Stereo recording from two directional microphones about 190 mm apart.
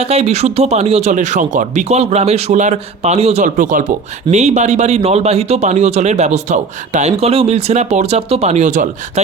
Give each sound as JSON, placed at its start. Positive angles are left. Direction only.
{"t": 0.0, "sound": "speech", "side_deg": -35}